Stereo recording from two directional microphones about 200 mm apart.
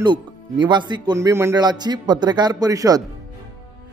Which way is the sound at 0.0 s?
20° right (ahead or behind).